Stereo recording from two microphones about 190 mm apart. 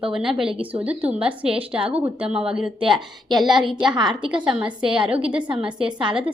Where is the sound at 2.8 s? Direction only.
25° right (ahead or behind).